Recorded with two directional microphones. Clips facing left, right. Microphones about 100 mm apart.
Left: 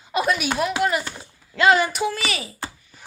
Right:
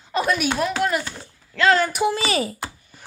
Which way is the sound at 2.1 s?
35° right (ahead or behind).